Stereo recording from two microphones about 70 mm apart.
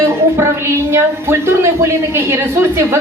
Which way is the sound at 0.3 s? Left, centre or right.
Right.